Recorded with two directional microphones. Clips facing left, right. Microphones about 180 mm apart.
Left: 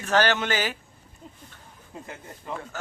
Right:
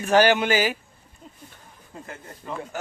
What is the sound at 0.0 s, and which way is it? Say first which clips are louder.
Speech: right 5 dB; 10° right (ahead or behind).